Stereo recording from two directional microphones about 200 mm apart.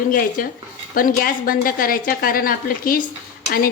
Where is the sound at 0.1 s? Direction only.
45° left (ahead or behind).